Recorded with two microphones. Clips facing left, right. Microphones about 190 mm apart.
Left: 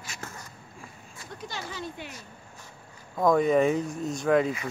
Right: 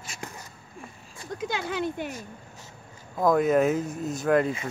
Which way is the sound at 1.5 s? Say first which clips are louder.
Right 8 dB; 60° right (ahead or behind).